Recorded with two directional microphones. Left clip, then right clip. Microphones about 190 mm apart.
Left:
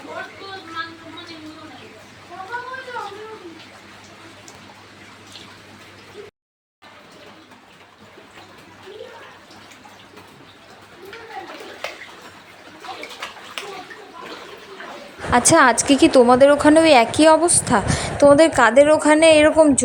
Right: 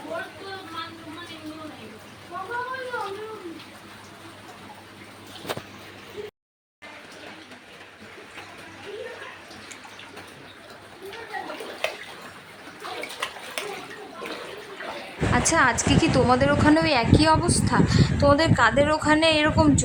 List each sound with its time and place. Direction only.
15.3 s a woman's voice: 25° left (ahead or behind)